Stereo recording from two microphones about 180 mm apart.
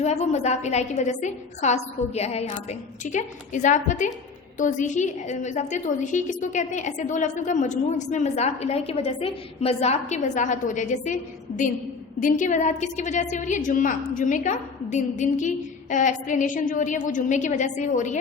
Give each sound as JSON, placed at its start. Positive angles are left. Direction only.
{"t": 0.0, "sound": "a woman's voice", "side_deg": 40}